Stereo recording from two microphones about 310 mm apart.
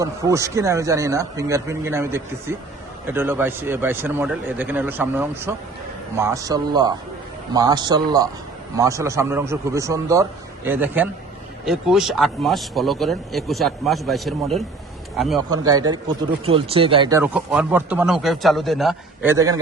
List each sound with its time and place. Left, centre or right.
0.0 s a man's voice: centre
15.4 s a man's voice: centre